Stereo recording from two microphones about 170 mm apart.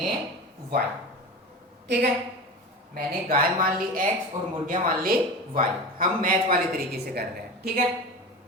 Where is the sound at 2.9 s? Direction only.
55° right (ahead or behind).